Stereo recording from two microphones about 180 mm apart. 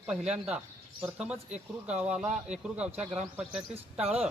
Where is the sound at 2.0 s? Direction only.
5° right (ahead or behind).